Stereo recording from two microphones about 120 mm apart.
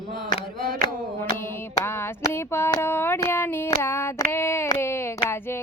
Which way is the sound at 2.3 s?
20° left (ahead or behind).